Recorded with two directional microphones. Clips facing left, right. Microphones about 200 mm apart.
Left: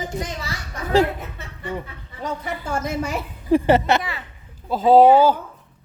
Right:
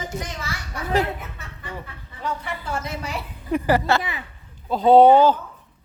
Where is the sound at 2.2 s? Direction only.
45° left (ahead or behind).